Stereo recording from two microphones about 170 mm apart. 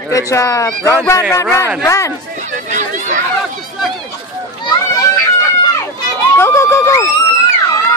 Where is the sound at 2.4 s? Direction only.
45° right (ahead or behind).